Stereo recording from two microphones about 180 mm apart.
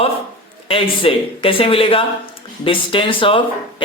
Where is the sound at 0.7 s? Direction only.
30° left (ahead or behind).